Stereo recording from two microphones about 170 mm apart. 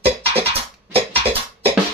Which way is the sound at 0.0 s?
35° right (ahead or behind).